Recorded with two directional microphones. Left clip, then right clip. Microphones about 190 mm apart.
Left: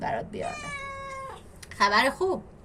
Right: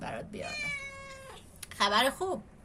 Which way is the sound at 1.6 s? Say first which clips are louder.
Left 5 dB; 25° right (ahead or behind).